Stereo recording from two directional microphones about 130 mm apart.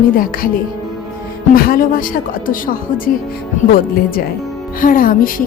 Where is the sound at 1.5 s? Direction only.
90° left.